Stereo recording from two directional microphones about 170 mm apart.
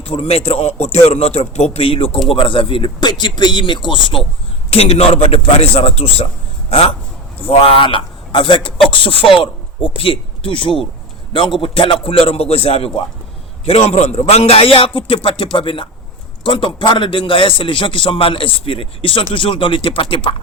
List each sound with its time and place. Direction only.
0.1 s a man's voice: 35° left (ahead or behind)